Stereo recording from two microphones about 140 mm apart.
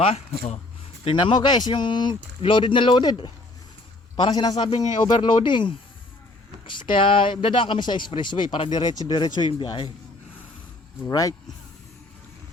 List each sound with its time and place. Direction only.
0.0 s speech: 50° left (ahead or behind)
1.0 s speech: 35° left (ahead or behind)
11.0 s speech: 25° left (ahead or behind)